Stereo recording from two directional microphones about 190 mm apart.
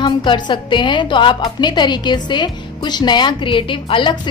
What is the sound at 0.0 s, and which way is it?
A woman's voice, 25° left (ahead or behind).